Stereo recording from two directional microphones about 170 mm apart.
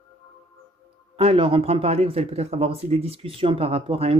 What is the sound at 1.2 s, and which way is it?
Speech, 35° right (ahead or behind).